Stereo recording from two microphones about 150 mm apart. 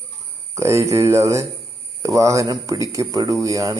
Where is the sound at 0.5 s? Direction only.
20° right (ahead or behind).